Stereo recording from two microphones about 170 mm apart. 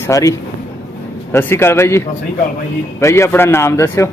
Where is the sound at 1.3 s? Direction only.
15° left (ahead or behind).